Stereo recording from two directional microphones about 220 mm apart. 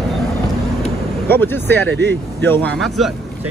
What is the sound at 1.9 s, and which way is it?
Speech, 50° right (ahead or behind).